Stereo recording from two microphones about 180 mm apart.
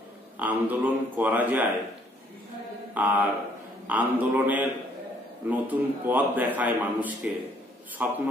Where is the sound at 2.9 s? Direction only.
10° right (ahead or behind).